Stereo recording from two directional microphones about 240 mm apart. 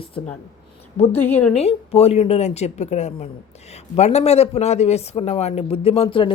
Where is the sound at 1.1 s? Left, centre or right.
Centre.